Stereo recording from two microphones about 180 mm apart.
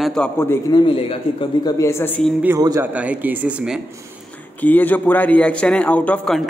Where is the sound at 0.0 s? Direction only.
5° left (ahead or behind).